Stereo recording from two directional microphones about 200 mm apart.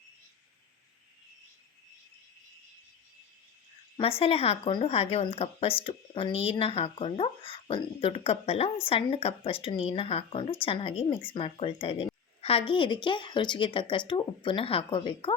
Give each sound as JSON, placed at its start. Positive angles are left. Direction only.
{"t": 4.2, "sound": "speech", "side_deg": 30}